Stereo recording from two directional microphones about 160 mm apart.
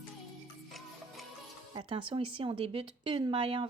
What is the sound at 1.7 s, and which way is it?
Speech, 30° right (ahead or behind).